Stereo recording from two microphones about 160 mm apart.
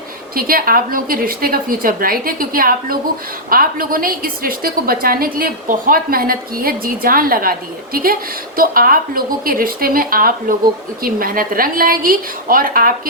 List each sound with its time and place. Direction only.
0.3 s a woman's voice: 65° right (ahead or behind)
8.5 s a woman's voice: 65° right (ahead or behind)